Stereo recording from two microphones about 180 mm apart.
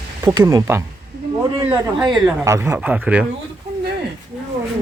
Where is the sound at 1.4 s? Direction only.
20° right (ahead or behind).